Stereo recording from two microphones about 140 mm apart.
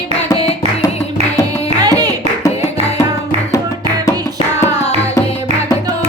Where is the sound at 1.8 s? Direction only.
25° right (ahead or behind).